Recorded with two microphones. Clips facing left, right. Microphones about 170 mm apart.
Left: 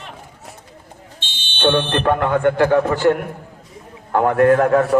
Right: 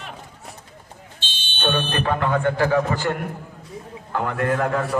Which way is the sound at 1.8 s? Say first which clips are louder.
Left 5 dB; 60° left (ahead or behind).